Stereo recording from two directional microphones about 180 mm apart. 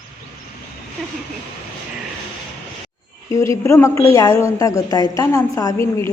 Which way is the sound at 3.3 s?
15° left (ahead or behind).